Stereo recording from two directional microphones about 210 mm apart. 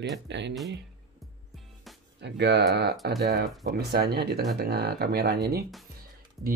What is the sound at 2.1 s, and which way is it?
Speech, 55° right (ahead or behind).